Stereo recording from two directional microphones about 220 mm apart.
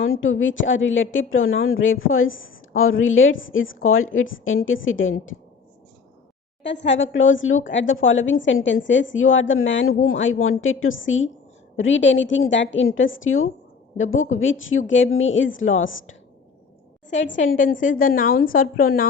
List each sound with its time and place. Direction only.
0.0 s a woman's voice: 60° left (ahead or behind)
6.6 s a woman's voice: 55° left (ahead or behind)
17.6 s a woman's voice: 35° left (ahead or behind)